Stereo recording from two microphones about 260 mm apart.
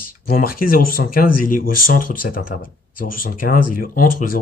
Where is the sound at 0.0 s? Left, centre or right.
Left.